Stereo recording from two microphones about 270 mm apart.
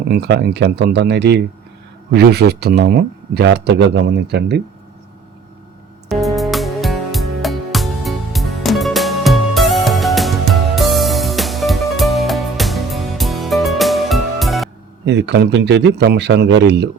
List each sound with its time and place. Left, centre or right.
0.1 s speech: right
6.1 s music: centre
15.0 s speech: right